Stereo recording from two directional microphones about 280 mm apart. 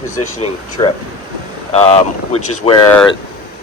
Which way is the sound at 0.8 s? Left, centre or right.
Centre.